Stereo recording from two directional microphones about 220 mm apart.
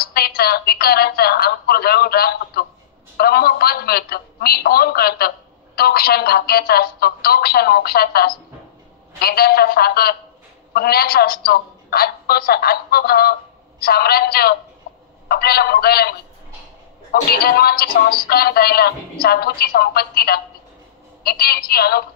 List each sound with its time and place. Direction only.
0.0 s a woman's voice: 45° left (ahead or behind)